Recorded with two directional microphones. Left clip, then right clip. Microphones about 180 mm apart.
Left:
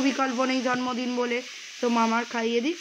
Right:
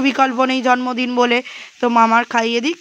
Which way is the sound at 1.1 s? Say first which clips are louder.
Right 12 dB; 60° right (ahead or behind).